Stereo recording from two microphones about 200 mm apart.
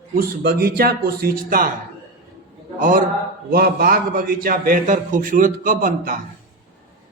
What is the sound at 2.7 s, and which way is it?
A man's voice, 40° right (ahead or behind).